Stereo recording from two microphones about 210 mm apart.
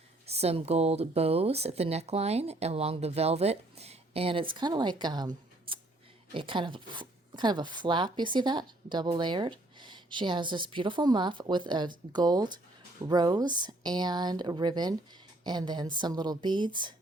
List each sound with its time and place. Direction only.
0.3 s speech: 30° right (ahead or behind)